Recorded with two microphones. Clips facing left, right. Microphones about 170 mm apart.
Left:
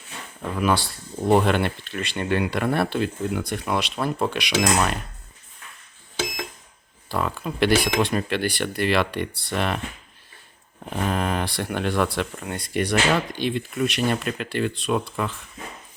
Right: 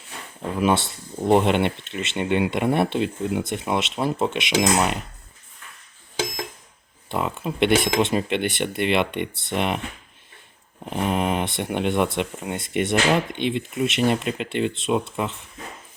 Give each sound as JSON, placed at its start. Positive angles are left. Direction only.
{"t": 0.5, "sound": "speech", "side_deg": -25}
{"t": 7.1, "sound": "speech", "side_deg": -20}
{"t": 10.8, "sound": "speech", "side_deg": -20}